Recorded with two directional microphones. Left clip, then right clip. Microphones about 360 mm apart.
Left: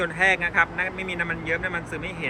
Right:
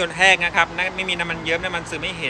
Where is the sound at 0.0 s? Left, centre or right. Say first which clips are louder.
Right 5 dB; centre.